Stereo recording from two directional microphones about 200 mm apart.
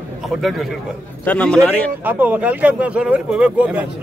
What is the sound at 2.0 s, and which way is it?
Speech, 10° right (ahead or behind).